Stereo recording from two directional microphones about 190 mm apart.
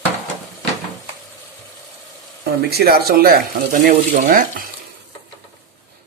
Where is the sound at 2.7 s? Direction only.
55° right (ahead or behind).